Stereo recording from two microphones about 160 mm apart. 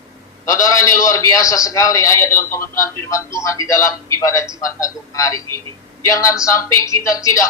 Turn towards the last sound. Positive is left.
turn(degrees=20)  # may be behind; listen again after turning